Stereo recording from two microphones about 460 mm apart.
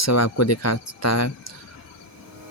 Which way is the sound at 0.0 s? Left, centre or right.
Left.